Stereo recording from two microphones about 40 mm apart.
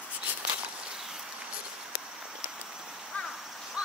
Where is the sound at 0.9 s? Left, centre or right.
Centre.